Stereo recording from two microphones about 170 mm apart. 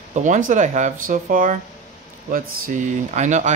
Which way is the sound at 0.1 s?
45° right (ahead or behind).